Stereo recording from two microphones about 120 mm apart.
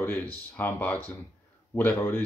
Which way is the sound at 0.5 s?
15° left (ahead or behind).